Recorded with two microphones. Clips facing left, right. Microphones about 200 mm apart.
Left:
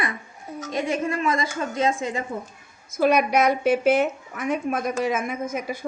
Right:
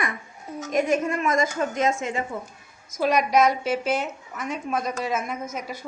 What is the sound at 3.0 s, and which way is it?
A woman's voice, 60° left (ahead or behind).